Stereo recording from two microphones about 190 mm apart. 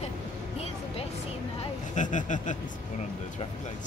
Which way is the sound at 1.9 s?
40° left (ahead or behind).